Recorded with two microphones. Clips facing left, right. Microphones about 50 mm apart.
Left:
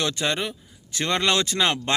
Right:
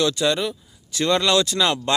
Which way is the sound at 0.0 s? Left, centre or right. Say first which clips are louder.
Right 5 dB; left.